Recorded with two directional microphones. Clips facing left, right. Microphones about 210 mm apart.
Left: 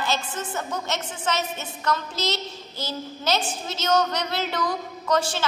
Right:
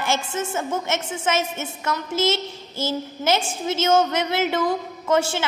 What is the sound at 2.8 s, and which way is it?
A woman's voice, 25° right (ahead or behind).